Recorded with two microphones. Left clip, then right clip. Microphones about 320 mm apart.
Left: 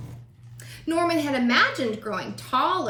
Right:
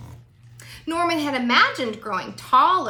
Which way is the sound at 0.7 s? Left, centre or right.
Centre.